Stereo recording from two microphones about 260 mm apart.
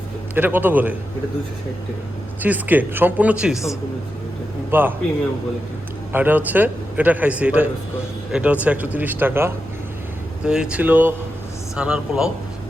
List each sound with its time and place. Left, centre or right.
0.3 s speech: centre
2.4 s speech: centre
4.7 s speech: centre
6.1 s a man's voice: centre